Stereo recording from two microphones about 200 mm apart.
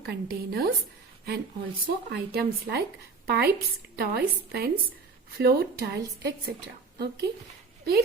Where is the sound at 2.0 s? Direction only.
50° right (ahead or behind).